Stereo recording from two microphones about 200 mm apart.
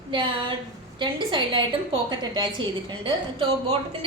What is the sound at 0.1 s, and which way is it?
A woman's voice, 25° right (ahead or behind).